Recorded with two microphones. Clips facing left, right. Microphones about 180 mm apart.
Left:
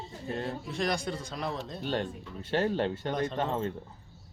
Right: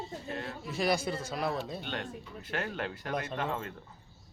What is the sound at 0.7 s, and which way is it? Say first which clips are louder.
Speech: right 3 dB; 5° right (ahead or behind).